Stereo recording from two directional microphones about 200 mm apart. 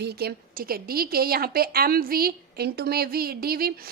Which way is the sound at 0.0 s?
50° right (ahead or behind).